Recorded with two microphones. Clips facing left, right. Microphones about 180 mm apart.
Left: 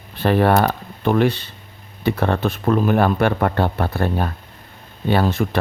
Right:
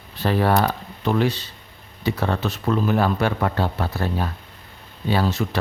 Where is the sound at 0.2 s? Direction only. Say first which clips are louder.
Left 4 dB; 60° left (ahead or behind).